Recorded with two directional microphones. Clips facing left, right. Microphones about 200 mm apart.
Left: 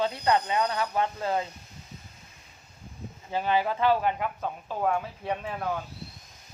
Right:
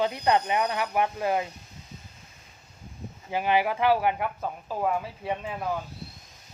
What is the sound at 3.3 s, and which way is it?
Speech, 15° right (ahead or behind).